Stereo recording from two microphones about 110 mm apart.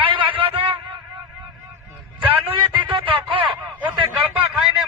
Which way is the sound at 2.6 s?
50° right (ahead or behind).